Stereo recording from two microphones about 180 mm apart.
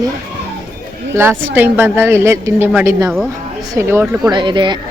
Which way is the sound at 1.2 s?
10° right (ahead or behind).